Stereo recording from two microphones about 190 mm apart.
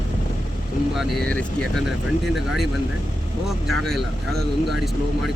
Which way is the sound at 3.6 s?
Centre (ahead or behind).